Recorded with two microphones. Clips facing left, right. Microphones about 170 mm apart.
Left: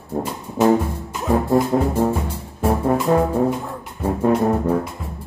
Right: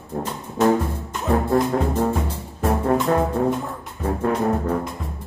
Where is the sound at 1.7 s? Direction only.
15° left (ahead or behind).